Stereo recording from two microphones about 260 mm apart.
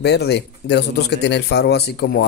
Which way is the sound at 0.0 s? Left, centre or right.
Left.